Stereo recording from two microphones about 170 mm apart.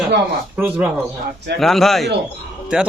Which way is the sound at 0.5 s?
10° right (ahead or behind).